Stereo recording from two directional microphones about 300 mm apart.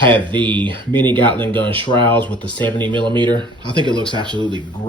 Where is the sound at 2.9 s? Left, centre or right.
Centre.